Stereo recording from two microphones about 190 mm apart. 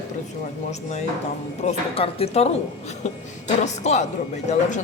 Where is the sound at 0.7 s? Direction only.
35° left (ahead or behind).